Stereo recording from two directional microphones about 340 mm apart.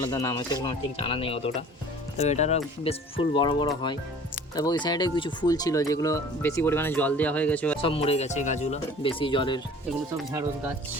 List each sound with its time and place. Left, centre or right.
0.0 s speech: centre
7.8 s speech: centre